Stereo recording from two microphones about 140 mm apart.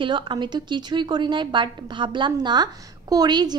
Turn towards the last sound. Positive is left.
turn(degrees=-30)  # may be behind; listen again after turning